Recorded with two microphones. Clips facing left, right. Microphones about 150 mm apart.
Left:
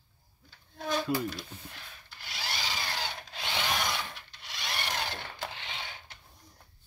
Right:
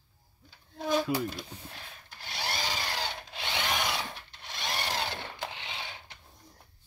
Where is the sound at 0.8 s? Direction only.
10° right (ahead or behind).